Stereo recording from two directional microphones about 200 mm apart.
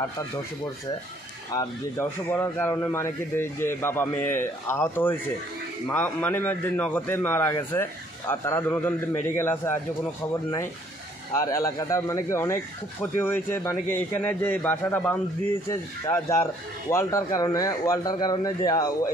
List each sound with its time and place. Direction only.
1.5 s a man's voice: 15° left (ahead or behind)
11.3 s a man's voice: 15° left (ahead or behind)